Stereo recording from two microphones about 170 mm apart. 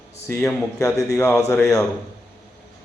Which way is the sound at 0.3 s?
20° left (ahead or behind).